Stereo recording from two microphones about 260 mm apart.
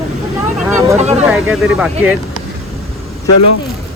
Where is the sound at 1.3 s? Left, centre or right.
Centre.